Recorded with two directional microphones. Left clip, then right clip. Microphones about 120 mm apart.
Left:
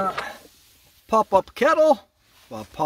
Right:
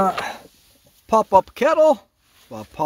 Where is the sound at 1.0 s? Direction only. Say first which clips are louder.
Right 3 dB; 50° right (ahead or behind).